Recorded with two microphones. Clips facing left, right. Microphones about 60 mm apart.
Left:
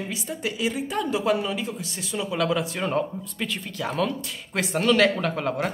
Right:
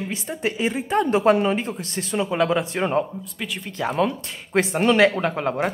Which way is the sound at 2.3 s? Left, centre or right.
Right.